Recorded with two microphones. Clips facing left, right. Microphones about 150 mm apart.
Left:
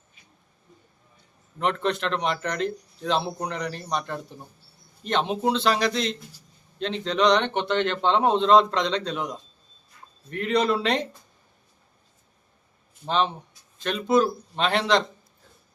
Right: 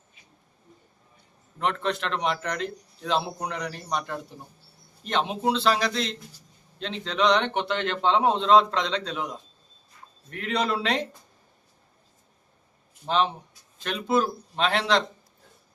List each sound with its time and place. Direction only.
1.5 s a man's voice: centre (ahead or behind)
13.1 s a man's voice: 5° right (ahead or behind)